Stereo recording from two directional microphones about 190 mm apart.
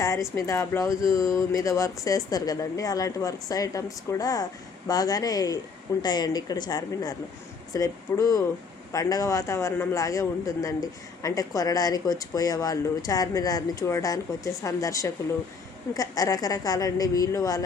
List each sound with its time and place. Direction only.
0.0 s a man's voice: 15° left (ahead or behind)